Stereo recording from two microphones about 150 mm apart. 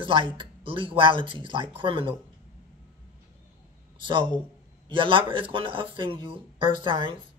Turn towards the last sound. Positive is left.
turn(degrees=-35)  # may be behind; listen again after turning